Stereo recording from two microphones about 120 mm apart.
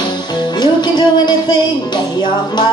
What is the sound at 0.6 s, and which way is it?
Music, 40° left (ahead or behind).